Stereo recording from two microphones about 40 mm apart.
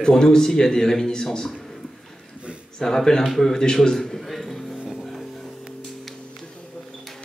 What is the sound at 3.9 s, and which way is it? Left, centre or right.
Music, centre.